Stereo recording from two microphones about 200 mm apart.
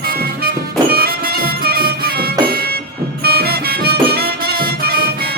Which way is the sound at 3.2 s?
50° right (ahead or behind).